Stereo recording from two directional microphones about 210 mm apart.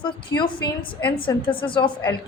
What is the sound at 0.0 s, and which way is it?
A woman's voice, 20° left (ahead or behind).